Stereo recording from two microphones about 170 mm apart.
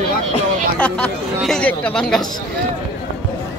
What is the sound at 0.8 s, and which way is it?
Speech, 10° left (ahead or behind).